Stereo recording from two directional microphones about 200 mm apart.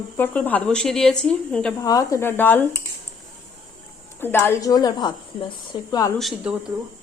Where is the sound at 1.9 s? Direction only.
15° left (ahead or behind).